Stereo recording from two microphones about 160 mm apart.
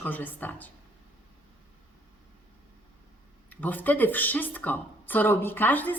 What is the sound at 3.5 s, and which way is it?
Speech, 10° left (ahead or behind).